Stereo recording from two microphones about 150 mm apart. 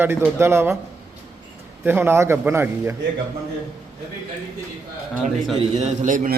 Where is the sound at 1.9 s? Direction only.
15° right (ahead or behind).